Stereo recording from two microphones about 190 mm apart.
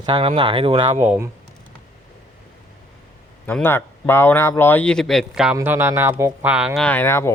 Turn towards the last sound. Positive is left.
turn(degrees=15)  # may be behind; listen again after turning